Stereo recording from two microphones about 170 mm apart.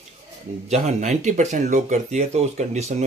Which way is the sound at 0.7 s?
40° right (ahead or behind).